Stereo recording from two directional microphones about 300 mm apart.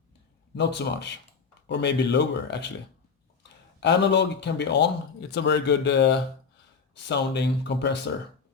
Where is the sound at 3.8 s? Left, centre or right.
Left.